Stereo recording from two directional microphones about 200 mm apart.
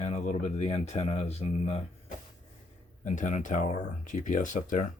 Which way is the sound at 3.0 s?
40° left (ahead or behind).